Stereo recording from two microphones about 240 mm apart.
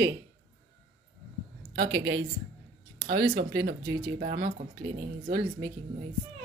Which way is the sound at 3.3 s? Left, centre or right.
Right.